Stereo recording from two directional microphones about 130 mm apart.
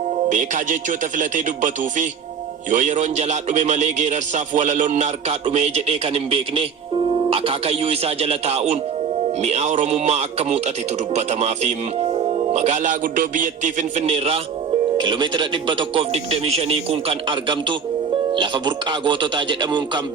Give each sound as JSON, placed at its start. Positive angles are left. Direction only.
{"t": 0.3, "sound": "a man's voice", "side_deg": -75}
{"t": 14.9, "sound": "speech", "side_deg": -40}
{"t": 16.1, "sound": "speech", "side_deg": -50}